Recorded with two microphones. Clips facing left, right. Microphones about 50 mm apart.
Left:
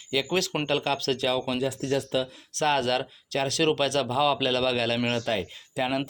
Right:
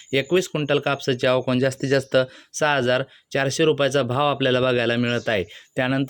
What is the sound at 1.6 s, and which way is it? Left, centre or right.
Speech, right.